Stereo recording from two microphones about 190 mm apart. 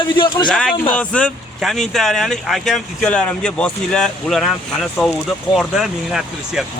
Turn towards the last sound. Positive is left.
turn(degrees=-5)  # may be behind; listen again after turning